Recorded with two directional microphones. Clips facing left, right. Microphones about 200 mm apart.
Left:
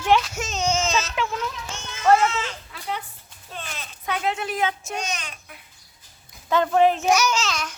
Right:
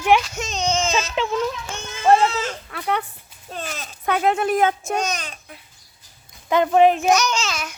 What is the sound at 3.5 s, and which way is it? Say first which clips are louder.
A child's voice: right 5 dB; 40° right (ahead or behind).